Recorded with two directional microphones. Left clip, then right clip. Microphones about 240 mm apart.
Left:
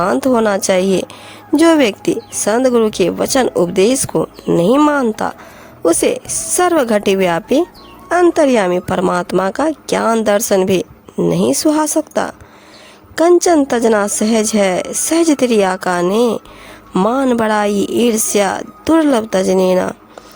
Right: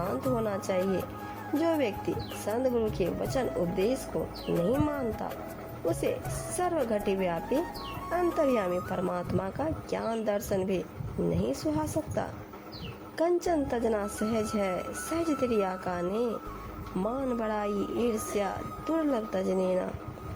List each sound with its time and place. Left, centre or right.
0.0 s a woman's voice: left